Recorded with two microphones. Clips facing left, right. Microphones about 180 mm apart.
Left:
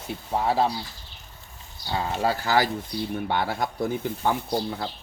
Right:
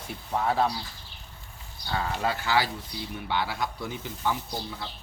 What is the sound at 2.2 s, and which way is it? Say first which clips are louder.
Speech: left 4 dB; 40° left (ahead or behind).